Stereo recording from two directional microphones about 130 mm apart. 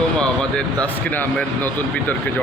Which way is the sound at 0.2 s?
10° left (ahead or behind).